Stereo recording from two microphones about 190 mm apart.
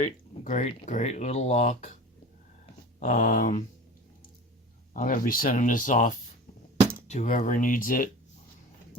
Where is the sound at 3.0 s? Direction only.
45° left (ahead or behind).